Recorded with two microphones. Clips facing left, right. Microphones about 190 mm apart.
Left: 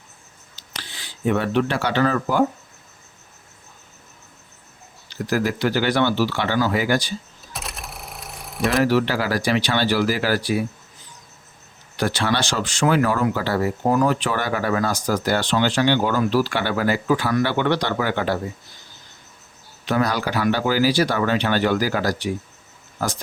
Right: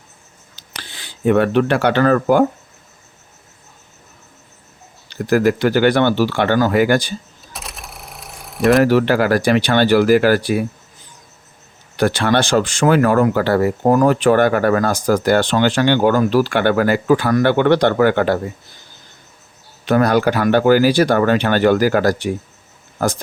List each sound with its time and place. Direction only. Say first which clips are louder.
0.5 s speech: right 2 dB; 55° right (ahead or behind)
5.0 s speech: right 7 dB; 55° right (ahead or behind)
7.5 s a sound: even; centre (ahead or behind)
8.8 s speech: right 6 dB; 55° right (ahead or behind)
11.9 s speech: right 6 dB; 55° right (ahead or behind)
19.9 s speech: right 7 dB; 55° right (ahead or behind)